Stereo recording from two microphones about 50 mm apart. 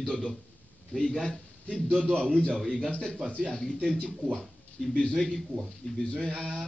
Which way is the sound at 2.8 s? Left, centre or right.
Centre.